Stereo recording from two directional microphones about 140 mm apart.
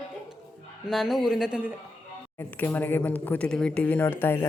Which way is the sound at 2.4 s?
15° left (ahead or behind).